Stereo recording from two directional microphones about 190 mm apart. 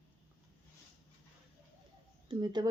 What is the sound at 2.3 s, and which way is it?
Speech, 25° right (ahead or behind).